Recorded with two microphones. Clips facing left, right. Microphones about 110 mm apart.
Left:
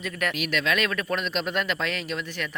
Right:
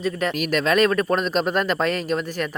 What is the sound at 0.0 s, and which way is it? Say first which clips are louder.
Speech: right 6 dB; 30° right (ahead or behind).